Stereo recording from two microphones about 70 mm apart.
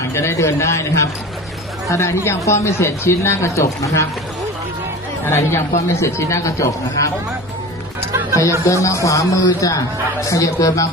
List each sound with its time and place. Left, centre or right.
0.1 s a man's voice: left
5.2 s a man's voice: left
8.6 s a man's voice: left